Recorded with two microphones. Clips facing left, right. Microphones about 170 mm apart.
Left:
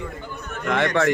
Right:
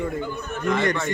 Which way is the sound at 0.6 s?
75° left (ahead or behind).